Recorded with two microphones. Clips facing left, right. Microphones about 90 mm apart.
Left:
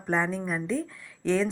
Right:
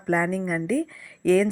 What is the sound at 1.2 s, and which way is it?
Speech, 5° right (ahead or behind).